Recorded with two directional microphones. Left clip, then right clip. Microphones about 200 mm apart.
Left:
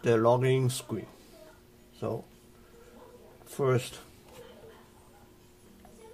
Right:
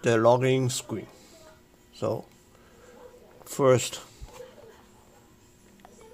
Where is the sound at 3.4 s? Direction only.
35° right (ahead or behind).